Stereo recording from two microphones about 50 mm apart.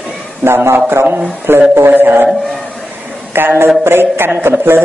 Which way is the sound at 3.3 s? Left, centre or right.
Right.